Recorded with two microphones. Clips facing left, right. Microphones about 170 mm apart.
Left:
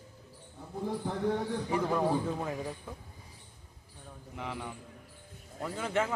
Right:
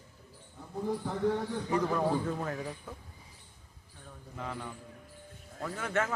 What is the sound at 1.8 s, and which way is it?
A man's voice, 10° left (ahead or behind).